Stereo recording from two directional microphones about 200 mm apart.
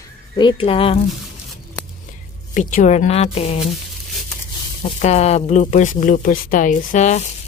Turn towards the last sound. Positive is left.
turn(degrees=35)  # may be behind; listen again after turning